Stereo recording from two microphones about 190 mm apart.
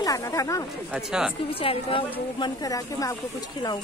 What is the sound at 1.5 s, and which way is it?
Speech, 30° left (ahead or behind).